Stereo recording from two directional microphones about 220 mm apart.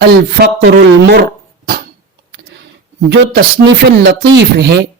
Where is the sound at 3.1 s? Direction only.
55° right (ahead or behind).